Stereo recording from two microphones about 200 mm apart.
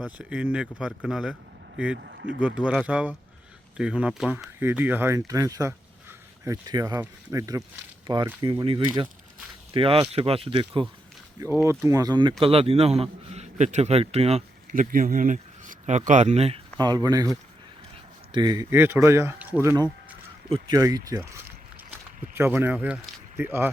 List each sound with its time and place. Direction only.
0.0 s speech: 5° right (ahead or behind)
2.0 s speech: 60° right (ahead or behind)
2.4 s speech: 5° right (ahead or behind); by 10.8 s 25° right (ahead or behind)
11.6 s a man's voice: 15° right (ahead or behind); by 16.6 s 30° right (ahead or behind)
16.8 s speech: 20° right (ahead or behind)
22.4 s speech: 10° right (ahead or behind)